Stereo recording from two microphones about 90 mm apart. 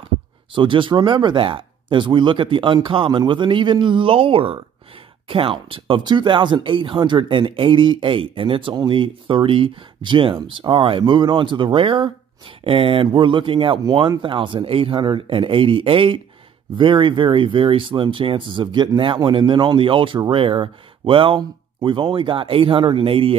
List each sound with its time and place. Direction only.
0.6 s speech: 65° right (ahead or behind); by 4.6 s 90° right
5.3 s speech: 80° right
13.8 s speech: 55° right (ahead or behind); by 21.4 s 75° right (ahead or behind)
21.4 s speech: 60° right (ahead or behind); by 23.3 s 90° right